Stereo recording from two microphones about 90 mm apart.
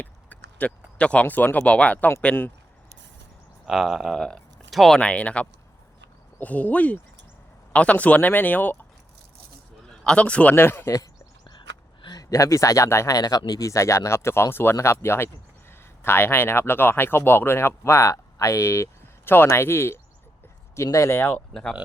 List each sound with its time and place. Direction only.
0.0 s speech: 15° left (ahead or behind)
3.7 s speech: centre (ahead or behind)
4.9 s speech: 15° left (ahead or behind)
10.0 s speech: 10° left (ahead or behind)
10.5 s speech: 25° left (ahead or behind)
10.8 s a sound: 40° left (ahead or behind)
12.0 s speech: 45° left (ahead or behind); by 21.4 s 20° left (ahead or behind)
21.5 s speech: 5° left (ahead or behind)